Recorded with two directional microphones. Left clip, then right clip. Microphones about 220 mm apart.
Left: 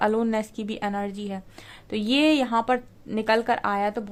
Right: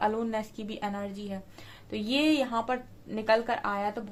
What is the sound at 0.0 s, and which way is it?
A woman's voice, 50° left (ahead or behind).